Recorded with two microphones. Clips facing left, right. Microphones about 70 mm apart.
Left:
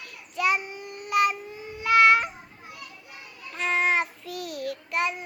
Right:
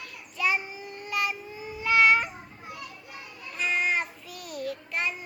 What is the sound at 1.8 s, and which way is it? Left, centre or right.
Babbling, left.